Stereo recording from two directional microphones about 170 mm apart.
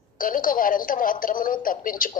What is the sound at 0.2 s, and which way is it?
A man's voice, 55° left (ahead or behind).